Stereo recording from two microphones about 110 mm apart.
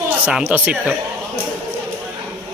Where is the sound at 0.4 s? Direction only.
15° right (ahead or behind).